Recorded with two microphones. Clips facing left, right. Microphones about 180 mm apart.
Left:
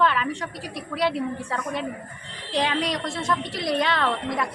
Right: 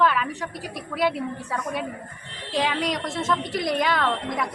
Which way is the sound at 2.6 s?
Centre (ahead or behind).